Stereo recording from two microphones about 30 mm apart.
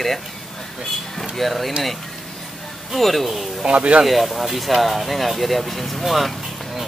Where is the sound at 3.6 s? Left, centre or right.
Right.